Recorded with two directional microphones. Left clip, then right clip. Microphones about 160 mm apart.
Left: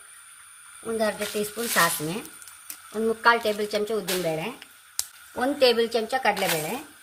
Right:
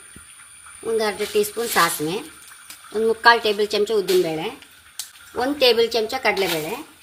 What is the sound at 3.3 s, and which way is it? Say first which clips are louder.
Speech: right 5 dB; 55° right (ahead or behind).